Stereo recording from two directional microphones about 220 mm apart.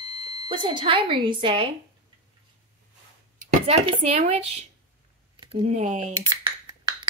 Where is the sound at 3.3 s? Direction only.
30° right (ahead or behind).